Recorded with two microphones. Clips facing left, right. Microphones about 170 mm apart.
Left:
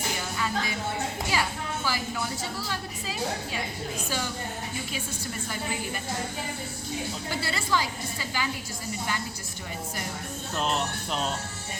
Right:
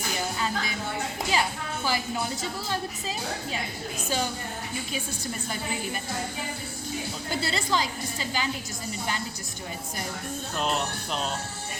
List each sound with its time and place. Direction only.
1.3 s music: 25° right (ahead or behind)
2.6 s a woman's voice: 25° right (ahead or behind)
7.4 s a woman's voice: 25° right (ahead or behind)
10.6 s speech: centre (ahead or behind)